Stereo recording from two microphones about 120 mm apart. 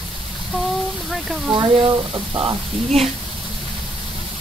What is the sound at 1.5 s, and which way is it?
Speech, 40° right (ahead or behind).